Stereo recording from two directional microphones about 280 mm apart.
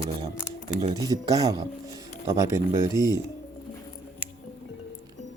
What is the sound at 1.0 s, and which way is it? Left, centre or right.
Speech, centre.